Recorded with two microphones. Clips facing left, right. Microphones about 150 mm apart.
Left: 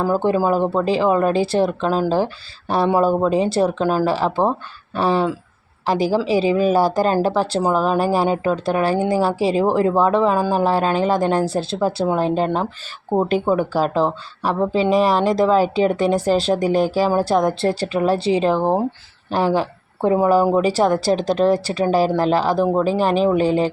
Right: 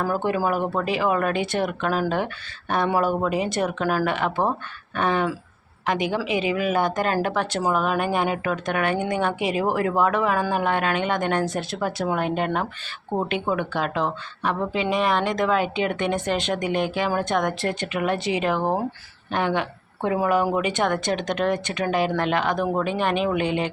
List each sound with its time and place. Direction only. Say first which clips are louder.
0.0 s a woman's voice: left 5 dB; 25° left (ahead or behind)